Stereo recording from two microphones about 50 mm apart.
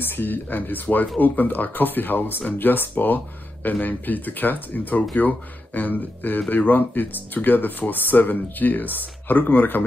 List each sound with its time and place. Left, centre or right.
0.2 s speech: left